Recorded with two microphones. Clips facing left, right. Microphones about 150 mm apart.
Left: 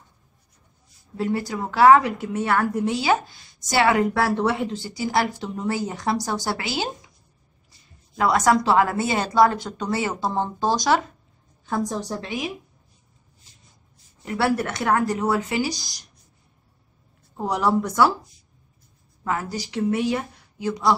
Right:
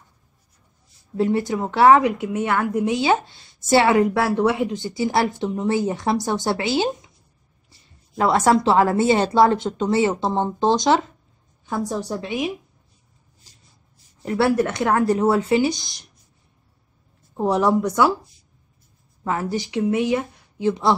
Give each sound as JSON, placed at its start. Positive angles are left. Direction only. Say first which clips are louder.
{"t": 1.1, "sound": "a woman's voice", "louder": "right 5 dB", "side_deg": -25}
{"t": 11.6, "sound": "speech", "louder": "right 1 dB", "side_deg": -10}
{"t": 14.2, "sound": "a woman's voice", "louder": "right 4 dB", "side_deg": -25}
{"t": 17.4, "sound": "speech", "louder": "right 3 dB", "side_deg": -20}
{"t": 19.2, "sound": "a woman's voice", "louder": "right 3 dB", "side_deg": -25}